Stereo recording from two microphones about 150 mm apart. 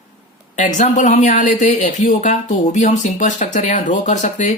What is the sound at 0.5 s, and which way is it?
Speech, 55° left (ahead or behind).